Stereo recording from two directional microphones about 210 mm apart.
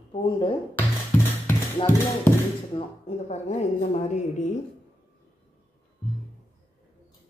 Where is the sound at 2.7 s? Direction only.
30° left (ahead or behind).